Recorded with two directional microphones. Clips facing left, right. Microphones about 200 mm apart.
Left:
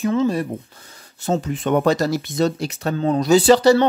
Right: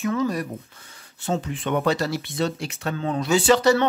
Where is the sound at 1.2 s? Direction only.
40° left (ahead or behind).